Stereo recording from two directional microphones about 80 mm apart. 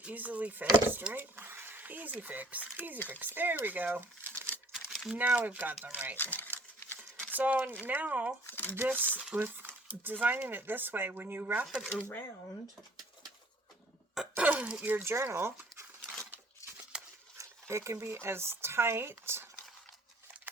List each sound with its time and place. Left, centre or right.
0.0 s speech: right
4.7 s crumpling: centre
5.1 s speech: right
6.3 s a sound: left
7.3 s speech: centre
8.4 s speech: left
8.7 s speech: right
11.9 s speech: left
14.3 s speech: centre
15.1 s speech: right
16.6 s a sound: left
17.3 s speech: right